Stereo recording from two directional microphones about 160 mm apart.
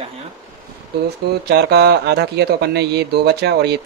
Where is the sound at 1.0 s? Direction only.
90° right.